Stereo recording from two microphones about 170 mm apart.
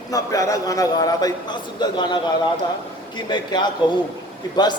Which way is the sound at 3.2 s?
25° left (ahead or behind).